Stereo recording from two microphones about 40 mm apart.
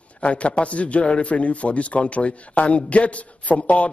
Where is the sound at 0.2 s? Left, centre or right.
Left.